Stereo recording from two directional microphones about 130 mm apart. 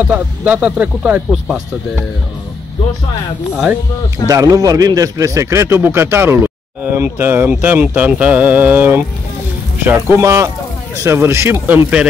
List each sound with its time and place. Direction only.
0.0 s a man's voice: 10° right (ahead or behind)
4.3 s a man's voice: 25° right (ahead or behind); by 12.1 s 10° right (ahead or behind)